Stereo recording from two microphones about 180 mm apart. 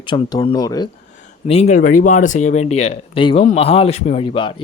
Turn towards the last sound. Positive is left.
turn(degrees=30)  # may be behind; listen again after turning